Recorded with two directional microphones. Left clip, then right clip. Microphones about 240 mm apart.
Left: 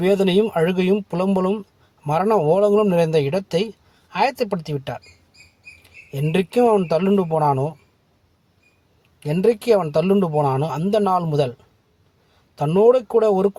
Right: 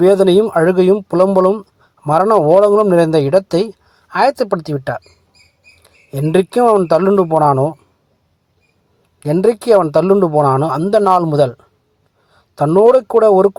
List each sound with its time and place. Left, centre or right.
0.0 s speech: right
9.2 s speech: right
12.5 s speech: right